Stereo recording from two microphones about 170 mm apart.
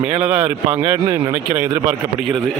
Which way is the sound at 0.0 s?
10° right (ahead or behind).